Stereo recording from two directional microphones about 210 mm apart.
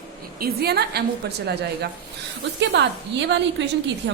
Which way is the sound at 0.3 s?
50° right (ahead or behind).